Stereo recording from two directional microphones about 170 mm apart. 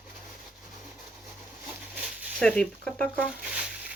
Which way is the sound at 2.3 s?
5° left (ahead or behind).